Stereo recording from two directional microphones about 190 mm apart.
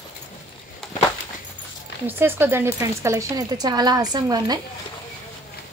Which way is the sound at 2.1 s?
10° right (ahead or behind).